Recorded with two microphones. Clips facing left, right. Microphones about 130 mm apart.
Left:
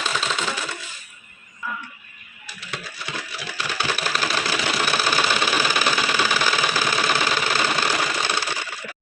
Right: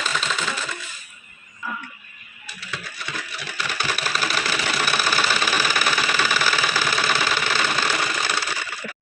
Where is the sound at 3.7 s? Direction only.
20° left (ahead or behind).